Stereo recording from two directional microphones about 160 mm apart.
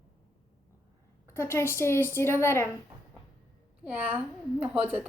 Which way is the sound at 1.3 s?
15° left (ahead or behind).